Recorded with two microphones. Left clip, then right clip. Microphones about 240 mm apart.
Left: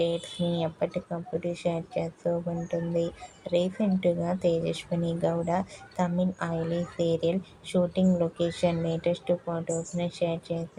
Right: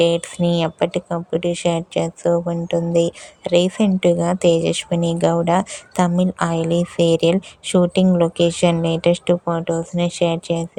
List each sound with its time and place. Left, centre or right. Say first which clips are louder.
0.0 s speech: right 11 dB; right